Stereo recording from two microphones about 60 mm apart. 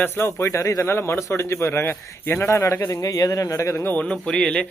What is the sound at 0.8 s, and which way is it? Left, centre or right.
A man's voice, left.